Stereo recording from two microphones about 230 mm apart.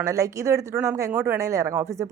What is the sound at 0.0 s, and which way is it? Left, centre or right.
A woman's voice, centre.